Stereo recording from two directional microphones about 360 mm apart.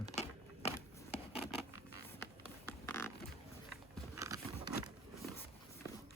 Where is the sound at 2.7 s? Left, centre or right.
Centre.